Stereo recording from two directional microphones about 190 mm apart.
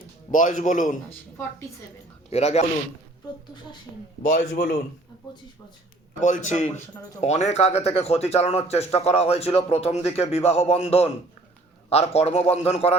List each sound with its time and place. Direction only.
0.3 s speech: 40° left (ahead or behind)
2.3 s speech: 35° left (ahead or behind)
4.3 s a man's voice: 55° left (ahead or behind)
6.2 s speech: 40° left (ahead or behind)